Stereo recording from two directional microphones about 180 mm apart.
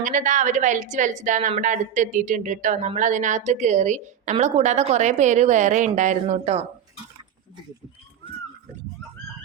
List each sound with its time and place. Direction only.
0.0 s a woman's voice: 45° right (ahead or behind)